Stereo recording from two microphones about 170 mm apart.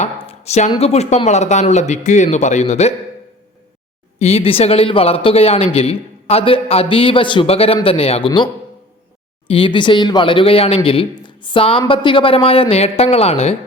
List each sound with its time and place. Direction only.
0.0 s a sound: 40° left (ahead or behind)
0.7 s speech: 35° left (ahead or behind)
4.2 s speech: 35° left (ahead or behind)
9.5 s speech: 30° left (ahead or behind)